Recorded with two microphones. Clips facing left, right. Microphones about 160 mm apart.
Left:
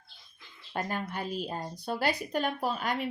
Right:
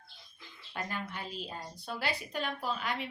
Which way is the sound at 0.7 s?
45° left (ahead or behind).